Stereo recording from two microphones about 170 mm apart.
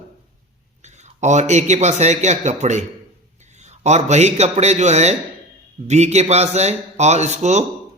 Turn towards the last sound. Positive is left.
turn(degrees=-40)  # may be behind; listen again after turning